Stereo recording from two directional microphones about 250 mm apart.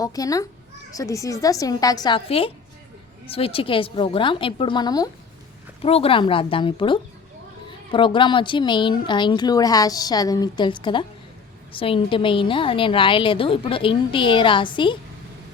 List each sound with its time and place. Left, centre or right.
0.0 s a woman's voice: centre